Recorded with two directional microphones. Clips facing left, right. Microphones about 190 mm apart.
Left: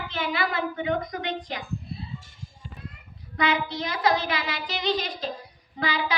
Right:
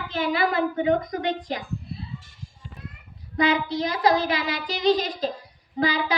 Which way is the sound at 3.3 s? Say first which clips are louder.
Right 4 dB; 35° right (ahead or behind).